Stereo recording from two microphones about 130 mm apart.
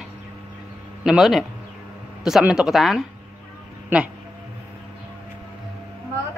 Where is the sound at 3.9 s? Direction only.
15° right (ahead or behind).